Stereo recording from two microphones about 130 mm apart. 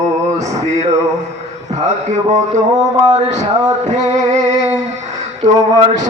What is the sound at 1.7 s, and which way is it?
Speech, 60° right (ahead or behind).